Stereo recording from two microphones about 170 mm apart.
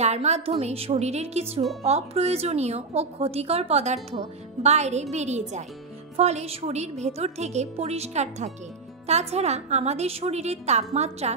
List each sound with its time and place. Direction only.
0.0 s a woman's voice: 40° right (ahead or behind)